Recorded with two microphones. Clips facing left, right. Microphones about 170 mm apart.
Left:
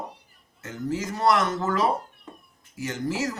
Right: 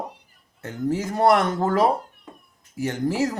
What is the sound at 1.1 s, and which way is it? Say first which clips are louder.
Speech: right 4 dB; 55° right (ahead or behind).